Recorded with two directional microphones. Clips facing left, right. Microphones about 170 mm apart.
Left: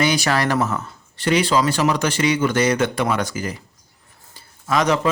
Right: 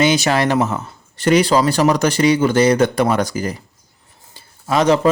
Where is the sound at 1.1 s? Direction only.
45° right (ahead or behind).